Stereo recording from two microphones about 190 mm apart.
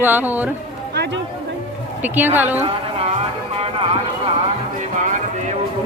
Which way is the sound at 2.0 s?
10° right (ahead or behind).